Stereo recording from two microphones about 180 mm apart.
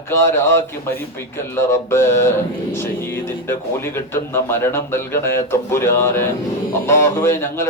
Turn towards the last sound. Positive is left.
turn(degrees=15)  # may be behind; listen again after turning